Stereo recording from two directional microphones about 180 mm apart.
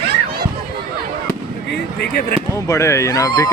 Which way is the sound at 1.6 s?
60° left (ahead or behind).